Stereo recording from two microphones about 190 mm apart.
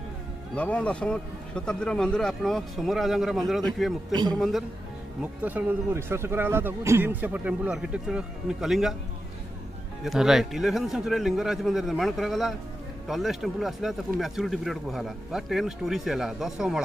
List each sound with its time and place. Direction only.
0.6 s speech: 5° left (ahead or behind)
4.1 s a man's voice: 20° right (ahead or behind)
4.4 s speech: centre (ahead or behind)
10.0 s speech: centre (ahead or behind)